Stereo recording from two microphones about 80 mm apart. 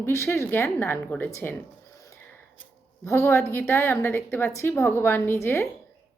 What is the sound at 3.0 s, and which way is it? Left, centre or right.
A woman's voice, left.